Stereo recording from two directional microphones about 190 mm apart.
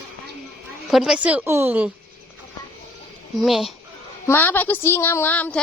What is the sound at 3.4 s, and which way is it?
Speech, centre (ahead or behind).